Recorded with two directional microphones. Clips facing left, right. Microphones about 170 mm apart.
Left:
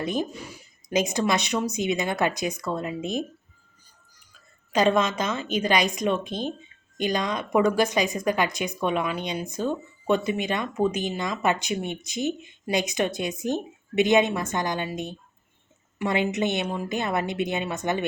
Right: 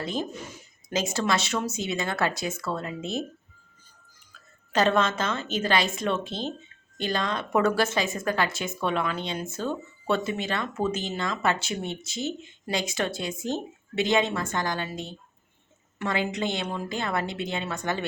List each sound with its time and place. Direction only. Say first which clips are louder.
0.0 s speech: left 3 dB; 15° left (ahead or behind)
4.7 s a woman's voice: left 2 dB; 10° left (ahead or behind)